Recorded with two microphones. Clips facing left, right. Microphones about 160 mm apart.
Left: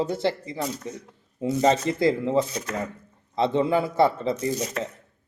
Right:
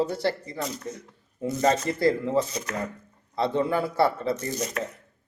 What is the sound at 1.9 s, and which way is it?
Speech, 50° right (ahead or behind).